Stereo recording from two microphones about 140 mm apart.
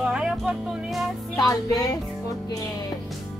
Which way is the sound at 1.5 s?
25° left (ahead or behind).